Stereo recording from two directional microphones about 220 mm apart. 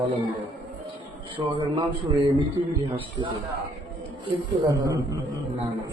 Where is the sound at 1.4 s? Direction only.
20° right (ahead or behind).